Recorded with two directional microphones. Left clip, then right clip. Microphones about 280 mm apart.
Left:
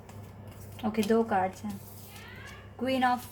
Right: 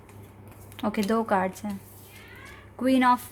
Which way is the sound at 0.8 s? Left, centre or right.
Right.